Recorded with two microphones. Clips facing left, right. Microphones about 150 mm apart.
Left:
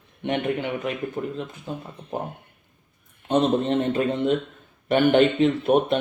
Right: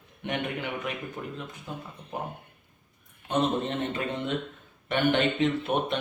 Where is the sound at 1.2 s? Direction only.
35° left (ahead or behind).